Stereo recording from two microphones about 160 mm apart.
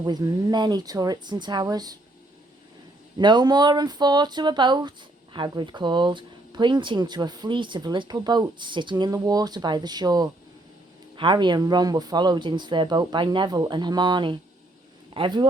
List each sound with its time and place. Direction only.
0.0 s speech: 20° right (ahead or behind)
3.2 s speech: 25° right (ahead or behind)